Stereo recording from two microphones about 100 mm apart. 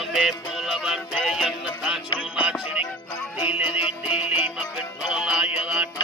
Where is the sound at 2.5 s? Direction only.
15° right (ahead or behind).